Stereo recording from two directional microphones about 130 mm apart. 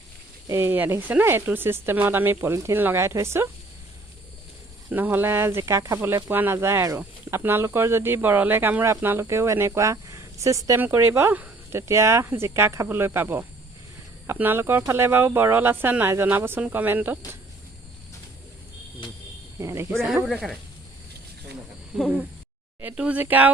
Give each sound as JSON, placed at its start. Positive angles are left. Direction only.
{"t": 0.4, "sound": "speech", "side_deg": -20}
{"t": 4.9, "sound": "speech", "side_deg": -15}
{"t": 19.5, "sound": "speech", "side_deg": -20}
{"t": 22.8, "sound": "speech", "side_deg": -10}